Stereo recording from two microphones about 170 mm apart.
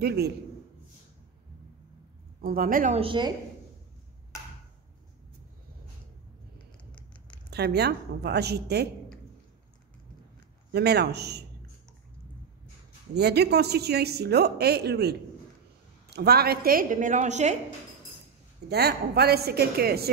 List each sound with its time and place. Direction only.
0.0 s speech: 70° right (ahead or behind)
2.4 s a woman's voice: 60° right (ahead or behind)
3.0 s a woman's voice: 30° right (ahead or behind)
7.5 s speech: 70° right (ahead or behind)
10.7 s speech: 75° right (ahead or behind)
13.1 s a woman's voice: 75° right (ahead or behind); by 17.6 s 45° right (ahead or behind)
18.7 s speech: 70° right (ahead or behind)